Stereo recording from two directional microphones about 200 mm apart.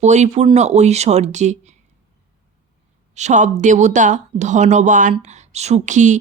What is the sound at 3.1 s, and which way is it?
Speech, 35° right (ahead or behind).